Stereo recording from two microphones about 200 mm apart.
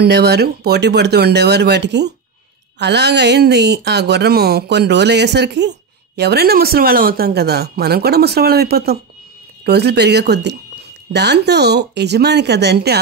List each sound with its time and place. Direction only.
0.0 s speech: 55° right (ahead or behind)